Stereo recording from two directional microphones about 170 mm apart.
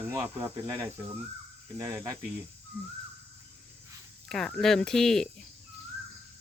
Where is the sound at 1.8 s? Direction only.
20° right (ahead or behind).